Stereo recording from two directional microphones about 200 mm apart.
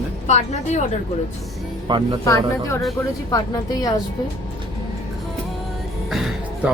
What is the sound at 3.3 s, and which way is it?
Speech, 20° left (ahead or behind).